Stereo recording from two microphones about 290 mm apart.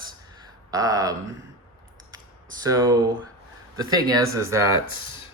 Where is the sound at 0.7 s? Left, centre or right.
Centre.